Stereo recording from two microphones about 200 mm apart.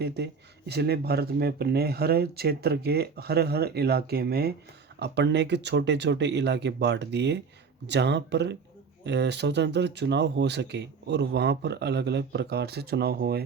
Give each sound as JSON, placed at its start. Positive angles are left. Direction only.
{"t": 0.0, "sound": "speech", "side_deg": -55}